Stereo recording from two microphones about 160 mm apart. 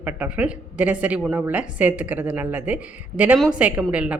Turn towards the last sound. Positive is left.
turn(degrees=-10)  # may be behind; listen again after turning